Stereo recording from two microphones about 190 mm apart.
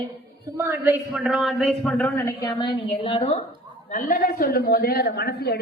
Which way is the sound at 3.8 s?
45° left (ahead or behind).